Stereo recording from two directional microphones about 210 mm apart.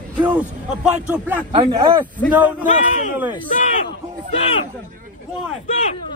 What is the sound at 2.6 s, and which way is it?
Speech, 35° left (ahead or behind).